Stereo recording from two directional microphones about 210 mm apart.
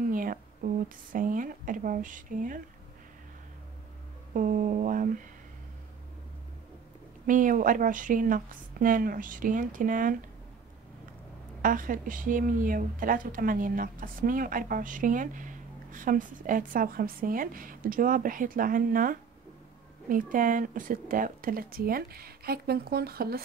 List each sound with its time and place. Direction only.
0.0 s speech: 40° right (ahead or behind)
4.3 s a woman's voice: 40° right (ahead or behind)
7.2 s a woman's voice: 40° right (ahead or behind)
11.6 s a woman's voice: 40° right (ahead or behind)